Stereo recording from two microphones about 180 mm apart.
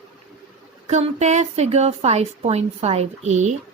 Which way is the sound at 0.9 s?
40° right (ahead or behind).